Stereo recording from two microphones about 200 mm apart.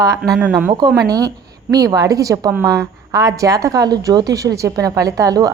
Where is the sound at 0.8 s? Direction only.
20° right (ahead or behind).